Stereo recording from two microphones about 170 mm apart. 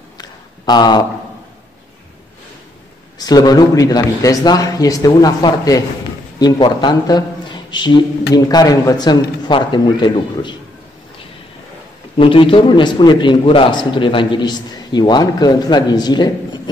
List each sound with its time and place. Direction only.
0.2 s a sound: 25° left (ahead or behind)
3.3 s a man's voice: 25° left (ahead or behind)
12.2 s a man's voice: 30° left (ahead or behind)